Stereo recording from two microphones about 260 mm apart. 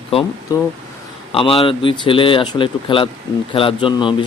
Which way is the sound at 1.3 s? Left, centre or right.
Left.